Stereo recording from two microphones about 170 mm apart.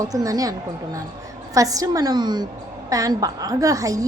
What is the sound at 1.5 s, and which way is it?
A woman's voice, 20° right (ahead or behind).